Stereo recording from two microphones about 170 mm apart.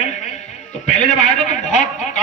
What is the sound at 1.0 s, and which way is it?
Speech, 45° left (ahead or behind).